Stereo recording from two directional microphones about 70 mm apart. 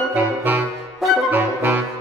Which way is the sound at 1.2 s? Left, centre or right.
Right.